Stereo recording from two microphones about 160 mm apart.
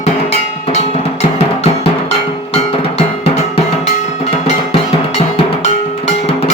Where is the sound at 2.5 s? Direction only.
40° left (ahead or behind).